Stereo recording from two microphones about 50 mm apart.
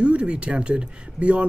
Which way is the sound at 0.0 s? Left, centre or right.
Right.